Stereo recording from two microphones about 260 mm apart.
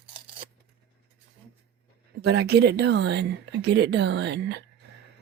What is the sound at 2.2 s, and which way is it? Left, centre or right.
Speech, right.